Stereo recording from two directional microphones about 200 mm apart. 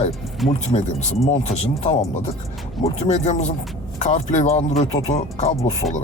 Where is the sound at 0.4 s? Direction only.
30° left (ahead or behind).